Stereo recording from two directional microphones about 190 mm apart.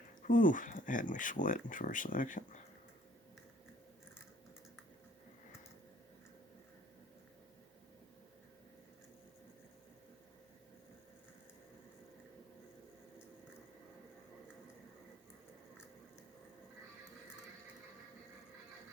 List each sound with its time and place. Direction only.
0.3 s speech: 45° left (ahead or behind)